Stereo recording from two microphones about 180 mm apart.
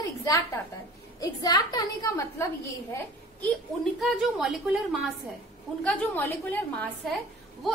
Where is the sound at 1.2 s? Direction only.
20° left (ahead or behind).